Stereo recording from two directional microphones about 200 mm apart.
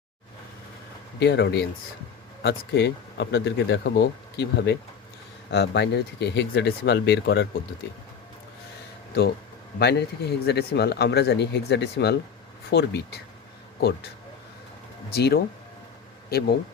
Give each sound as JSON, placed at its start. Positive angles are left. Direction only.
{"t": 1.2, "sound": "speech", "side_deg": 55}
{"t": 9.7, "sound": "speech", "side_deg": 55}
{"t": 15.1, "sound": "speech", "side_deg": 55}